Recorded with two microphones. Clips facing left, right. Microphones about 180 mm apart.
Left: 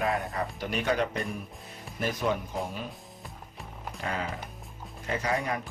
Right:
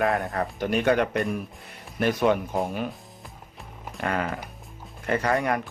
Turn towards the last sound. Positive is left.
turn(degrees=-60)  # may be behind; listen again after turning